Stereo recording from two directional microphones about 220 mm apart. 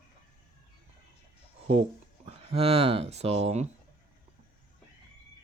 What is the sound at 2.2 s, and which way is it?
Speech, 25° right (ahead or behind).